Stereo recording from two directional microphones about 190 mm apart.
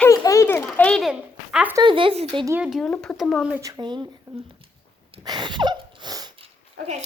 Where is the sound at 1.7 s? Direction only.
25° right (ahead or behind).